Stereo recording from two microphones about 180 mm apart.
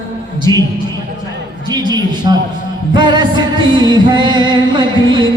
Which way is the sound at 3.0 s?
25° right (ahead or behind).